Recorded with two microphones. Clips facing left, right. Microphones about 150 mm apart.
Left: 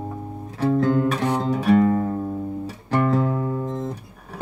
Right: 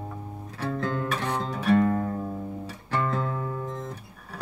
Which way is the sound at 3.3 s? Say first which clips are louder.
Left 7 dB; 30° left (ahead or behind).